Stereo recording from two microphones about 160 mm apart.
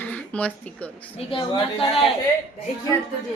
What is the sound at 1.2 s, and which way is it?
Speech, 35° left (ahead or behind).